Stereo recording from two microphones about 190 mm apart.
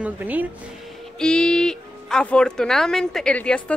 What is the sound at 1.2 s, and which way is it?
Speech, 5° left (ahead or behind).